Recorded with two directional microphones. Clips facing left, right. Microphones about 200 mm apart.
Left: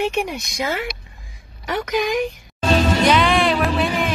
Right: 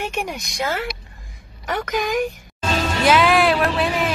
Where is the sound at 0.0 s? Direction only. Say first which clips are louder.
Left 5 dB; centre (ahead or behind).